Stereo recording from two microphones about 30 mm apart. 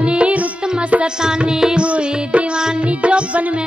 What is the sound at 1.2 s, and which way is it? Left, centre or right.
Music, right.